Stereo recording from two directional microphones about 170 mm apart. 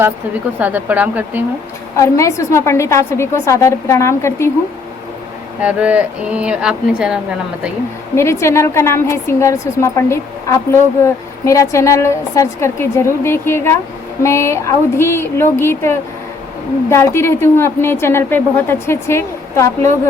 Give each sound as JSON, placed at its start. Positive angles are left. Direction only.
{"t": 0.6, "sound": "speech", "side_deg": -10}
{"t": 2.0, "sound": "a woman's voice", "side_deg": 15}
{"t": 5.6, "sound": "speech", "side_deg": -10}
{"t": 8.1, "sound": "a woman's voice", "side_deg": 15}